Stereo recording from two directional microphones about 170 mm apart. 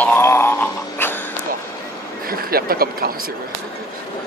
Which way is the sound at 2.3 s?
60° right (ahead or behind).